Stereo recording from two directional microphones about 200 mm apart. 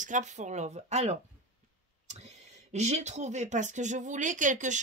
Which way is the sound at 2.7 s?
35° right (ahead or behind).